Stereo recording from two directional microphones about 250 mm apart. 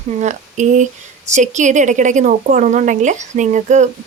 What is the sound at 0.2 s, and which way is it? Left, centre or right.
Speech, right.